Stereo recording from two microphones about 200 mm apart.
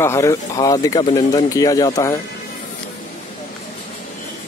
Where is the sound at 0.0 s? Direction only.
15° left (ahead or behind).